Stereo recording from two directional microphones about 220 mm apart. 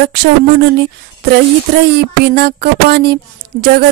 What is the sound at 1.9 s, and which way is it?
Speech, 50° right (ahead or behind).